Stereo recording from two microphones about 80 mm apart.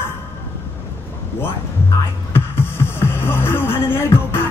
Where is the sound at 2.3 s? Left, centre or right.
Left.